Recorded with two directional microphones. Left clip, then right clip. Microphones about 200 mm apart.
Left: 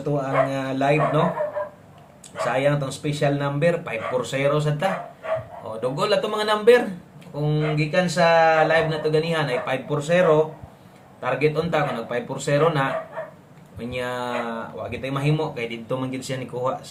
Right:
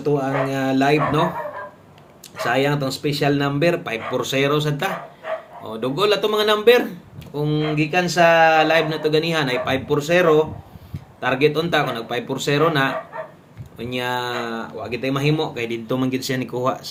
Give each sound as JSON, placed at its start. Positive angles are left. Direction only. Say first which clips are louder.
{"t": 0.2, "sound": "speech", "louder": "even", "side_deg": -45}
{"t": 2.5, "sound": "speech", "louder": "right 2 dB", "side_deg": -45}